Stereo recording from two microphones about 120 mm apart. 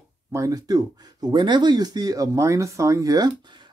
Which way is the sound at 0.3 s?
30° right (ahead or behind).